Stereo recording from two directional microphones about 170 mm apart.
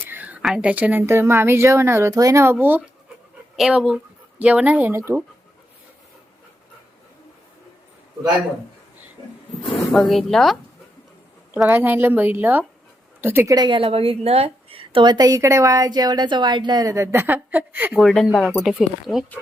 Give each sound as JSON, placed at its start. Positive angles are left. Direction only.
{"t": 0.0, "sound": "a woman's voice", "side_deg": -10}
{"t": 9.6, "sound": "speech", "side_deg": 0}
{"t": 11.5, "sound": "a woman's voice", "side_deg": -10}
{"t": 18.0, "sound": "speech", "side_deg": 0}